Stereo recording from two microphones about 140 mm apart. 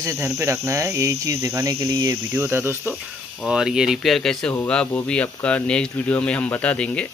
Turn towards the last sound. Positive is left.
turn(degrees=10)  # may be behind; listen again after turning